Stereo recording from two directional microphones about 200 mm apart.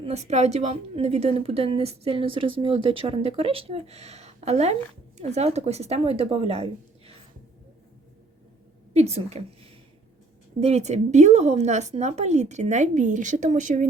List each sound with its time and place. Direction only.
0.0 s a woman's voice: 35° right (ahead or behind)
8.9 s a woman's voice: 30° right (ahead or behind)
10.6 s a woman's voice: 30° right (ahead or behind)